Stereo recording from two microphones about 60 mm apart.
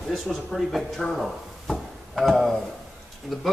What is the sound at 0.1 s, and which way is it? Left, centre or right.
A man's voice, centre.